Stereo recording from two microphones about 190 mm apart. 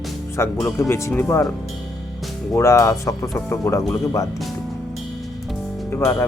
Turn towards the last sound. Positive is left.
turn(degrees=15)  # may be behind; listen again after turning